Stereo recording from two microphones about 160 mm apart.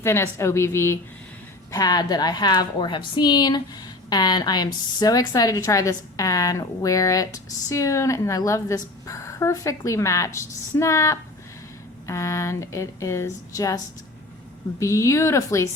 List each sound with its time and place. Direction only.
0.0 s a woman's voice: 15° left (ahead or behind)